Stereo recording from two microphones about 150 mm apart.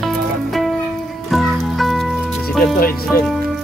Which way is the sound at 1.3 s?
Centre (ahead or behind).